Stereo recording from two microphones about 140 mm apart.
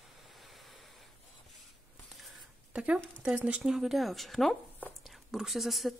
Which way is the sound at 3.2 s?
5° right (ahead or behind).